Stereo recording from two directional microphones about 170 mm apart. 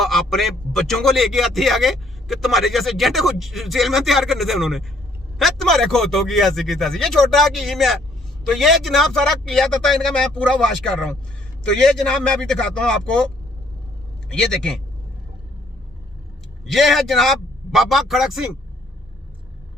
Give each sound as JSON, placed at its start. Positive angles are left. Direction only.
{"t": 0.0, "sound": "speech", "side_deg": 0}
{"t": 14.3, "sound": "speech", "side_deg": 5}
{"t": 16.7, "sound": "speech", "side_deg": 0}